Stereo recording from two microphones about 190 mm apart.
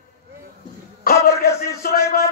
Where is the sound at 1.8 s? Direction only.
55° left (ahead or behind).